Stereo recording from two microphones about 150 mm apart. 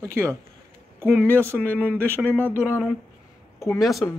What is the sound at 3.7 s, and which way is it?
Speech, centre (ahead or behind).